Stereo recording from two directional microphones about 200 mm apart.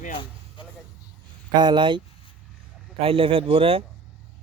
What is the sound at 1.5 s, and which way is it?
Speech, 20° right (ahead or behind).